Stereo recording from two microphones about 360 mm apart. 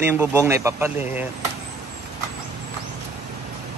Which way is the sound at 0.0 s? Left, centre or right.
Centre.